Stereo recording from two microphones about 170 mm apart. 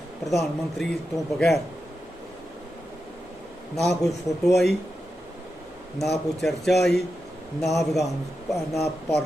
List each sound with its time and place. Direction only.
0.3 s speech: centre (ahead or behind)
3.8 s speech: centre (ahead or behind)
6.0 s speech: centre (ahead or behind)